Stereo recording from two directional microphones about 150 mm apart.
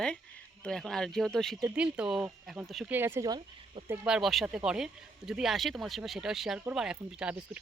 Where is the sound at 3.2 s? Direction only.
30° right (ahead or behind).